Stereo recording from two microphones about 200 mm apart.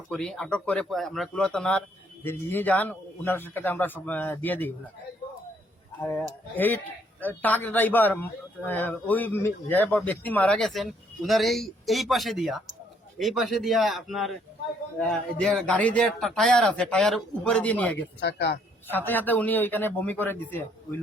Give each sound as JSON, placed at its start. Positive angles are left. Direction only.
{"t": 0.1, "sound": "a man's voice", "side_deg": 5}
{"t": 6.0, "sound": "a man's voice", "side_deg": 10}
{"t": 18.2, "sound": "speech", "side_deg": 60}
{"t": 18.9, "sound": "a man's voice", "side_deg": 10}